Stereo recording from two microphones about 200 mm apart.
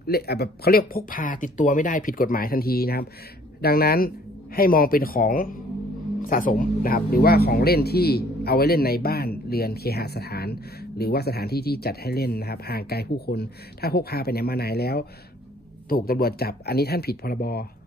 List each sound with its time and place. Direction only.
0.0 s speech: 50° left (ahead or behind)